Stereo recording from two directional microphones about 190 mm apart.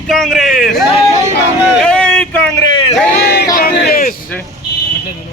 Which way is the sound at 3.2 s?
60° left (ahead or behind).